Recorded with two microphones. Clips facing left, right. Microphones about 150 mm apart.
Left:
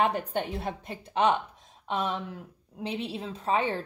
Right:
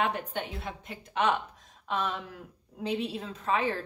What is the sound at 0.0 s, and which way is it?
A woman's voice, 40° left (ahead or behind).